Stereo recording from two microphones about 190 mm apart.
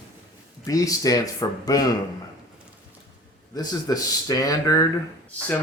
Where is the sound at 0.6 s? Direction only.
20° left (ahead or behind).